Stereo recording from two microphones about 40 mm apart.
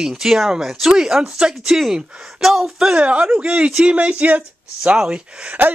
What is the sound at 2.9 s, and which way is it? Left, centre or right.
Speech, right.